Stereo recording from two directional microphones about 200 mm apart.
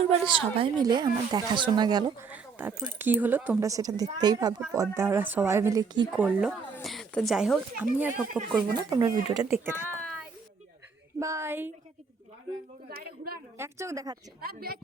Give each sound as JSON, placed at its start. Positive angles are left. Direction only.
{"t": 0.1, "sound": "a woman's voice", "side_deg": -25}
{"t": 2.2, "sound": "speech", "side_deg": -10}
{"t": 6.1, "sound": "speech", "side_deg": -5}
{"t": 8.7, "sound": "speech", "side_deg": -15}
{"t": 11.2, "sound": "speech", "side_deg": -15}
{"t": 12.9, "sound": "speech", "side_deg": -50}
{"t": 13.6, "sound": "speech", "side_deg": -15}
{"t": 14.4, "sound": "speech", "side_deg": -50}